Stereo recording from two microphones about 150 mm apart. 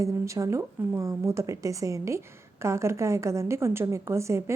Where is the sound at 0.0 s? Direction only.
20° right (ahead or behind).